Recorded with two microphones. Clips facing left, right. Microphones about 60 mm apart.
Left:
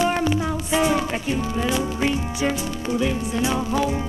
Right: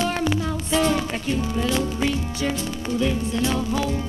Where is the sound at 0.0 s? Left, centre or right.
Centre.